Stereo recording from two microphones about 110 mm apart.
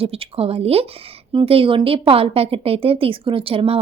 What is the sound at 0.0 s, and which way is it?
A woman's voice, 60° right (ahead or behind).